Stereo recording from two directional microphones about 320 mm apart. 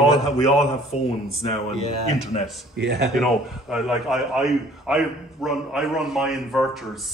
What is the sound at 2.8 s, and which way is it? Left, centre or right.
Speech, right.